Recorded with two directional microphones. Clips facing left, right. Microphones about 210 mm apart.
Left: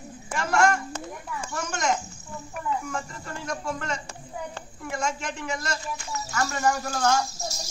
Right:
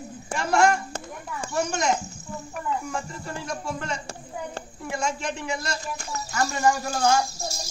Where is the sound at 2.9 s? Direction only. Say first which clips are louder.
Right 2 dB; 15° right (ahead or behind).